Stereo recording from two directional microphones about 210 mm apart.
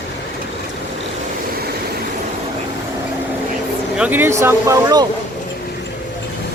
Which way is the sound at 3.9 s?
5° right (ahead or behind).